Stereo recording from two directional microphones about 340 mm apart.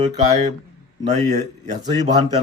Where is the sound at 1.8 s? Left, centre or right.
Centre.